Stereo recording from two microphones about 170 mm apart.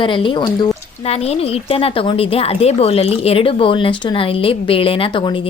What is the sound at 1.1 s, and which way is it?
A woman's voice, 35° left (ahead or behind).